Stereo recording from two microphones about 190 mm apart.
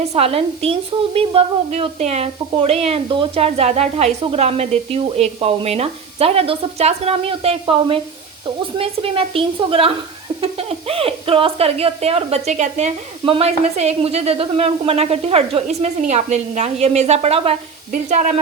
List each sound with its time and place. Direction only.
0.1 s a woman's voice: 30° right (ahead or behind)